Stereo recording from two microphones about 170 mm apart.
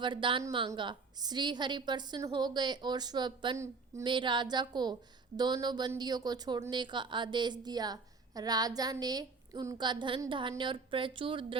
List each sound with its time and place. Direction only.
0.0 s a woman's voice: 30° right (ahead or behind)